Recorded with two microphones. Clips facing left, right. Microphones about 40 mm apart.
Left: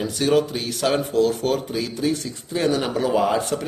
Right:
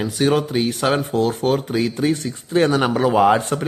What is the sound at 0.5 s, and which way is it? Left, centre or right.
Speech, right.